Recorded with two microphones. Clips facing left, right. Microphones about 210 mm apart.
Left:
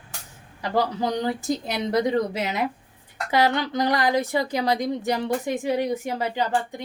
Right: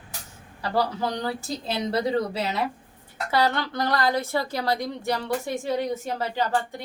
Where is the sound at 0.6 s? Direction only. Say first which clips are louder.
Left 2 dB; 15° left (ahead or behind).